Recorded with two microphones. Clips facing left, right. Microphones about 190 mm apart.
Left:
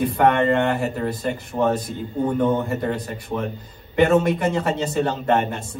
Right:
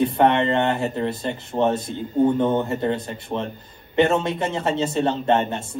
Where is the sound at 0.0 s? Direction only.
25° right (ahead or behind).